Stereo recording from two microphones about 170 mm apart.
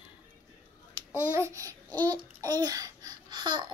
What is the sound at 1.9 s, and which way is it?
Babbling, 25° right (ahead or behind).